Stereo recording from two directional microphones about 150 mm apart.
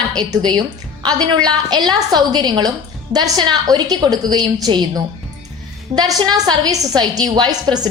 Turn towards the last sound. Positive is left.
turn(degrees=-25)  # may be behind; listen again after turning